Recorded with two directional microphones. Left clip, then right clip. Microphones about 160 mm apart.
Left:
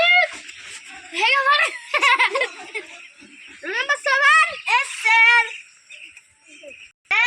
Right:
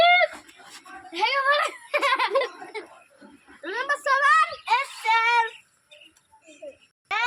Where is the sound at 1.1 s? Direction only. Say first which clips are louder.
Left 5 dB; 25° right (ahead or behind).